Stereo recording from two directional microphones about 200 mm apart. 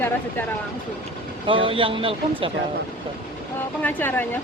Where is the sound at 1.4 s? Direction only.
25° right (ahead or behind).